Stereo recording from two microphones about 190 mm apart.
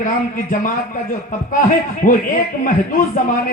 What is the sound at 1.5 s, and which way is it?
Speech, 45° left (ahead or behind).